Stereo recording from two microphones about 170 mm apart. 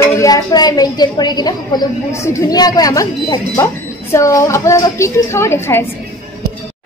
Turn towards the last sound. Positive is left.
turn(degrees=15)  # may be behind; listen again after turning